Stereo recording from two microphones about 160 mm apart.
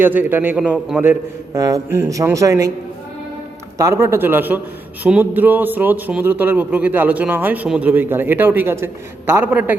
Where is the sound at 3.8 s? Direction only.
20° right (ahead or behind).